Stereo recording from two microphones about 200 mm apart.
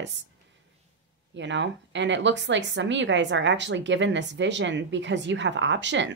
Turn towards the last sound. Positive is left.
turn(degrees=-65)  # may be behind; listen again after turning